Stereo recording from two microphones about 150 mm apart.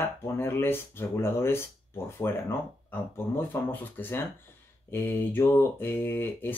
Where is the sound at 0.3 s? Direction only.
15° left (ahead or behind).